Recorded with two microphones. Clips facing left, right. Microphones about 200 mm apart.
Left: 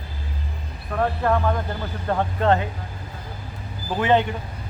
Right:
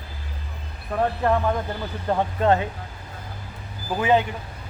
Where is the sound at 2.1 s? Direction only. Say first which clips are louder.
Even; 10° right (ahead or behind).